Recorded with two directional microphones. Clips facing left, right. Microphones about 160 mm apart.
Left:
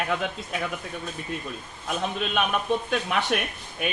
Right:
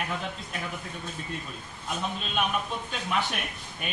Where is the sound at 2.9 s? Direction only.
70° left (ahead or behind).